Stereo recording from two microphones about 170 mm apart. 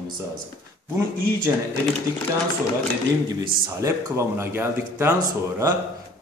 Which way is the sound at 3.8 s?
15° right (ahead or behind).